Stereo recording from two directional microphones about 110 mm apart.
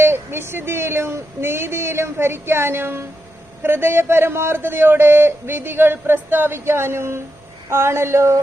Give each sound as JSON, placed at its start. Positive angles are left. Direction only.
{"t": 0.0, "sound": "a man's voice", "side_deg": -20}